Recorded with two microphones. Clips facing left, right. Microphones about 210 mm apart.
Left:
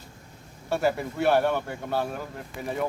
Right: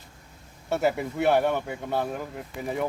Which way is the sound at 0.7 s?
20° right (ahead or behind).